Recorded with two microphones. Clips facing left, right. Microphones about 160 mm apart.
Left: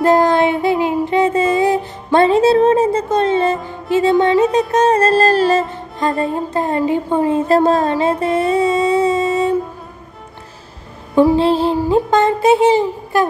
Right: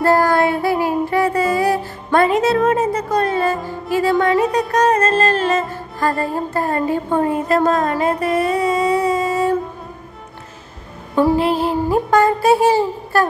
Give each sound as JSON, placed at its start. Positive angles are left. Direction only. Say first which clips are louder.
{"t": 0.0, "sound": "child singing", "louder": "left 2 dB", "side_deg": 20}
{"t": 2.1, "sound": "music", "louder": "left 4 dB", "side_deg": 30}
{"t": 5.7, "sound": "music", "louder": "left 1 dB", "side_deg": 20}
{"t": 11.3, "sound": "music", "louder": "left 3 dB", "side_deg": 30}